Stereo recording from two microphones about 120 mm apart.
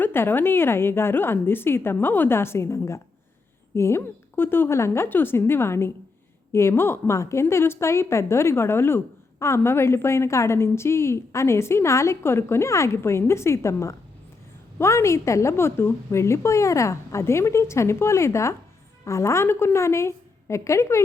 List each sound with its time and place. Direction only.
0.0 s a woman's voice: 20° left (ahead or behind)